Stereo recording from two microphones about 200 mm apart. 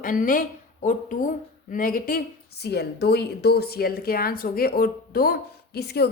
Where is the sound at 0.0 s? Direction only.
45° left (ahead or behind).